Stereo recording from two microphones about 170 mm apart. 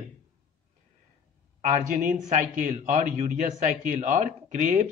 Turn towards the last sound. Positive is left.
turn(degrees=-45)  # may be behind; listen again after turning